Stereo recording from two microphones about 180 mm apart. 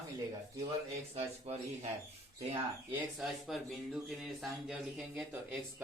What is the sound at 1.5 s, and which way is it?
Speech, 35° right (ahead or behind).